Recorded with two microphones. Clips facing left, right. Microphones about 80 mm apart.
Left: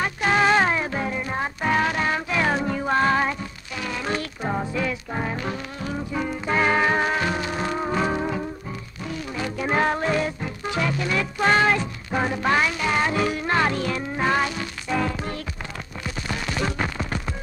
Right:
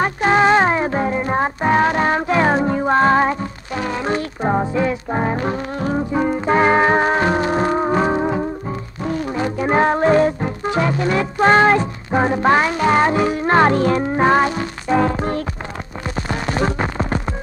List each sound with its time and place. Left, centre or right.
0.0 s music: right
9.0 s music: right
13.1 s music: right
13.5 s music: right
16.2 s a sound: right